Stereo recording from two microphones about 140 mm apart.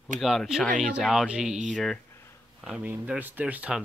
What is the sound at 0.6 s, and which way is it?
Speech, 75° right (ahead or behind).